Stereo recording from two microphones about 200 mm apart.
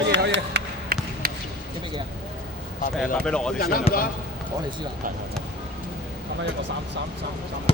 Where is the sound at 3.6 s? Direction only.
45° left (ahead or behind).